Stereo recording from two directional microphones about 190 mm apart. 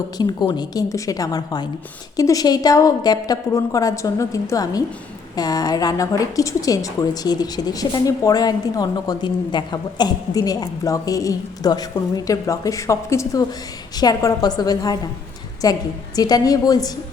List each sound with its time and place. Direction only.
0.2 s a woman's voice: 20° left (ahead or behind)